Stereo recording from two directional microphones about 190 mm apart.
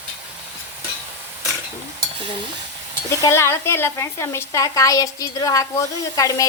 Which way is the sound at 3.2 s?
15° left (ahead or behind).